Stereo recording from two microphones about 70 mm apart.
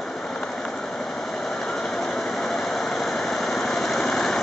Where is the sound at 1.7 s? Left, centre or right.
Centre.